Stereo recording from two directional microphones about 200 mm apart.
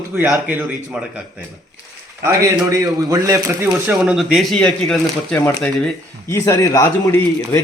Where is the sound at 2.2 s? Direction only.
15° right (ahead or behind).